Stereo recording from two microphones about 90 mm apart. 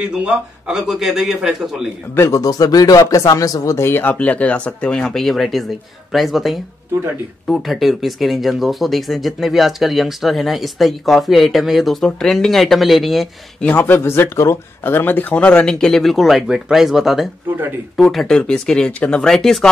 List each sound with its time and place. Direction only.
0.0 s speech: 10° right (ahead or behind)
2.1 s speech: 35° left (ahead or behind); by 13.3 s centre (ahead or behind)
13.6 s speech: 20° left (ahead or behind); by 19.7 s 5° left (ahead or behind)